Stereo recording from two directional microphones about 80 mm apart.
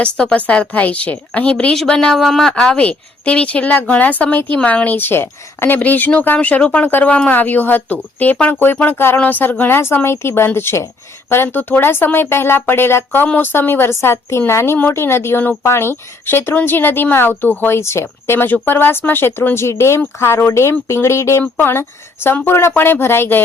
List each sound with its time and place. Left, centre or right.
0.0 s a woman's voice: centre